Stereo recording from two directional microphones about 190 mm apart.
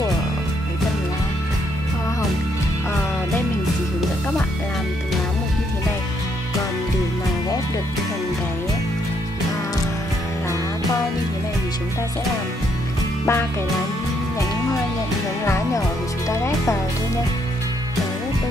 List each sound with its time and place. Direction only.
13.2 s music: 10° left (ahead or behind)
15.4 s music: 15° left (ahead or behind)